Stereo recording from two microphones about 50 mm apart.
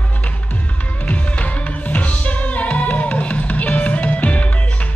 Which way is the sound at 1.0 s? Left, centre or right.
Left.